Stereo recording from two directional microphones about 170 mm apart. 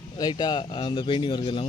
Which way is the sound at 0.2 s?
25° left (ahead or behind).